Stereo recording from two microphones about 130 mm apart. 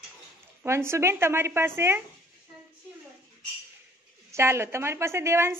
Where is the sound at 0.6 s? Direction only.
20° right (ahead or behind).